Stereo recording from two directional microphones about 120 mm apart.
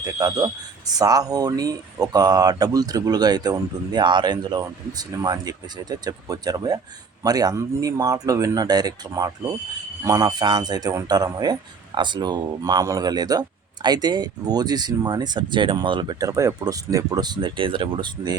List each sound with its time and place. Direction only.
0.0 s speech: 30° right (ahead or behind)
16.3 s speech: 25° right (ahead or behind); by 18.3 s 40° right (ahead or behind)